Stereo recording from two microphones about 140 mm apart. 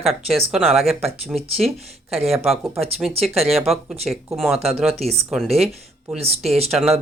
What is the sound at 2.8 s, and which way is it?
Speech, 45° right (ahead or behind).